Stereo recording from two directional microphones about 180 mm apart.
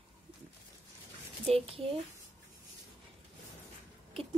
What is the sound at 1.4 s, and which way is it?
Speech, 35° right (ahead or behind).